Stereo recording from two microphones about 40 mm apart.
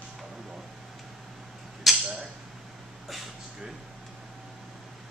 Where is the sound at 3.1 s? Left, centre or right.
Centre.